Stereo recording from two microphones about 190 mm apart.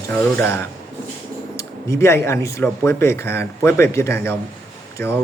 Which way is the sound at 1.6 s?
15° left (ahead or behind).